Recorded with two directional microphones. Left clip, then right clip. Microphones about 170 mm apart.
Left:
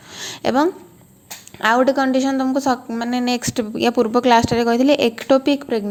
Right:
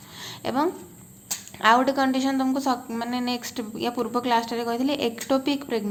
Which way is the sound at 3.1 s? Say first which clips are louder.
Left 10 dB; 40° left (ahead or behind).